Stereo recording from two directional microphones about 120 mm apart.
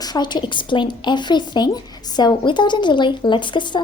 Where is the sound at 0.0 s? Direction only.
35° left (ahead or behind).